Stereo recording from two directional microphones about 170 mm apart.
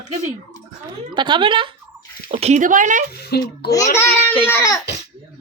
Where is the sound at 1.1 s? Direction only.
30° right (ahead or behind); by 3.0 s 50° right (ahead or behind).